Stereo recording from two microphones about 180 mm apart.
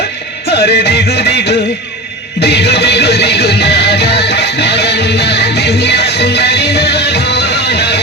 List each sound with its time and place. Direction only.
0.5 s music: 65° left (ahead or behind)